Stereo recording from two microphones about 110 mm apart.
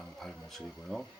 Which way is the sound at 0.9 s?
5° left (ahead or behind).